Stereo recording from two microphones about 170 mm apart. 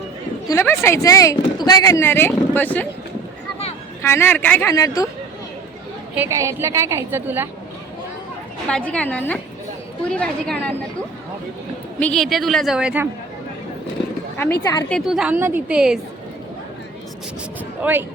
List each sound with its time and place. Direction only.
0.4 s speech: 15° left (ahead or behind)
4.0 s speech: 15° left (ahead or behind)
4.7 s speech: 20° left (ahead or behind)
6.1 s a woman's voice: 15° right (ahead or behind)
8.7 s speech: 5° left (ahead or behind)
11.9 s a woman's voice: 5° left (ahead or behind)
14.8 s a woman's voice: centre (ahead or behind)
17.8 s a woman's voice: 10° right (ahead or behind)